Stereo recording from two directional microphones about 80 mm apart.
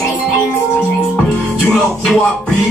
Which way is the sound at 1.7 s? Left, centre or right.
Centre.